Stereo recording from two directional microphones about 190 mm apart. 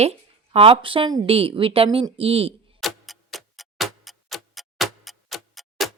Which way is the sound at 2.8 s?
Centre (ahead or behind).